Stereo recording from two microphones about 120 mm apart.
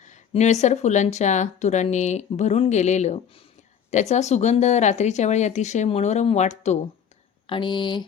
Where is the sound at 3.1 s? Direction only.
50° left (ahead or behind).